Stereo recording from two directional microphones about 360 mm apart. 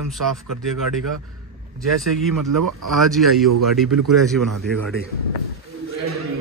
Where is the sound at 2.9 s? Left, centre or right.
Centre.